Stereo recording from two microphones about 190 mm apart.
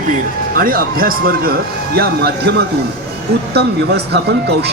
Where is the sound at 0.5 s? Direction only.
50° right (ahead or behind).